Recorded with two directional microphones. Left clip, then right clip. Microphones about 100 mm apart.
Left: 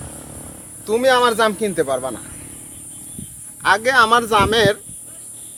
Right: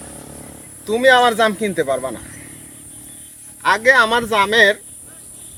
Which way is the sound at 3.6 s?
40° left (ahead or behind).